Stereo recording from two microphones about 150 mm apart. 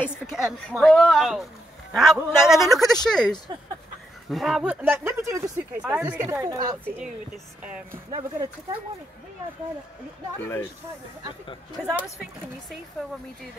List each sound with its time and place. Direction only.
0.3 s speech: 5° right (ahead or behind)
4.8 s speech: 15° right (ahead or behind)
6.4 s a woman's voice: 25° right (ahead or behind)
7.6 s speech: 10° right (ahead or behind)
8.1 s a woman's voice: 25° right (ahead or behind)
11.8 s speech: 5° right (ahead or behind)